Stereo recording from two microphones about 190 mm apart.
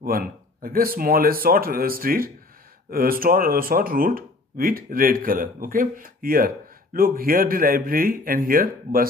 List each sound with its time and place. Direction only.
0.0 s speech: 50° right (ahead or behind)